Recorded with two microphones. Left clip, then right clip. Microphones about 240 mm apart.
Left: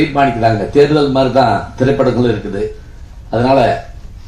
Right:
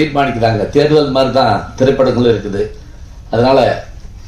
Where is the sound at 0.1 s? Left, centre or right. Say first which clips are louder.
Left 1 dB; right.